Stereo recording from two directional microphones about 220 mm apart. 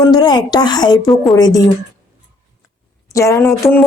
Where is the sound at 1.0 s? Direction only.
Centre (ahead or behind).